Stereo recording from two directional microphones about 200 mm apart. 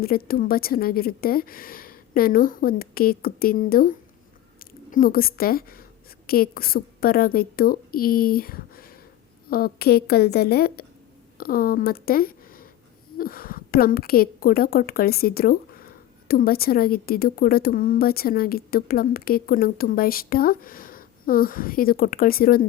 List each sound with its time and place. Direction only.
0.0 s a woman's voice: 50° left (ahead or behind)